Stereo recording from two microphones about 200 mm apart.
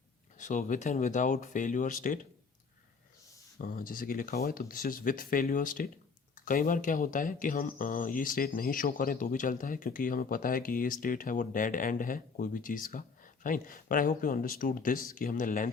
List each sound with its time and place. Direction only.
0.3 s speech: 40° left (ahead or behind)
3.6 s speech: 45° left (ahead or behind)